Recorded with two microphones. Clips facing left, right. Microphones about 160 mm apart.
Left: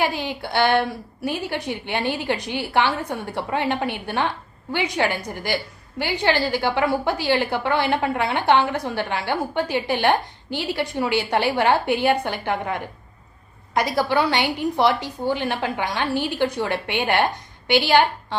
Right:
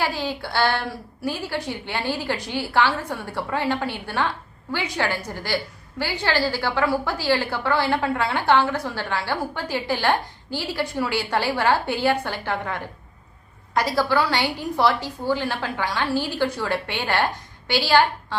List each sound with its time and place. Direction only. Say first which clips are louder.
0.0 s a woman's voice: left 2 dB; 20° left (ahead or behind)